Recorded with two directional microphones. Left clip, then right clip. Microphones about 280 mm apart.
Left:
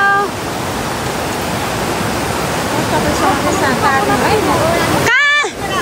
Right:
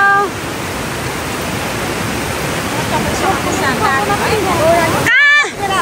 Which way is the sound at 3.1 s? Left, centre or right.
Left.